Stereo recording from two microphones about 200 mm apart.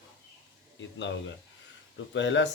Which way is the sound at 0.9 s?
65° left (ahead or behind).